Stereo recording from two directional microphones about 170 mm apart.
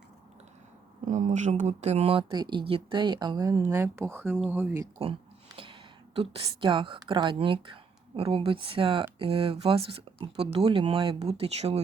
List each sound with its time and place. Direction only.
1.0 s a woman's voice: 45° right (ahead or behind); by 4.9 s 15° right (ahead or behind)
6.1 s a woman's voice: 30° right (ahead or behind)